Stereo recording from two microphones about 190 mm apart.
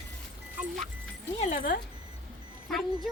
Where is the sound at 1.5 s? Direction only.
45° left (ahead or behind).